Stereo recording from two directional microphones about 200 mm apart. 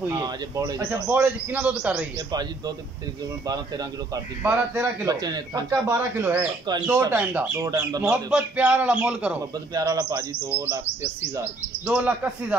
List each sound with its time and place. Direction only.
0.1 s a man's voice: 20° right (ahead or behind)
3.4 s speech: 20° right (ahead or behind)
4.4 s a man's voice: 10° right (ahead or behind)
8.0 s a man's voice: 5° right (ahead or behind)
9.8 s a man's voice: 20° right (ahead or behind)